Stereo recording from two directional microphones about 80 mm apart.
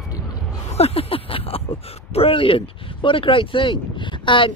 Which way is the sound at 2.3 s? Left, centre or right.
Left.